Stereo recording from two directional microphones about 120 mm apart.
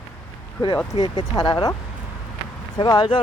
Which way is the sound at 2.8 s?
35° left (ahead or behind).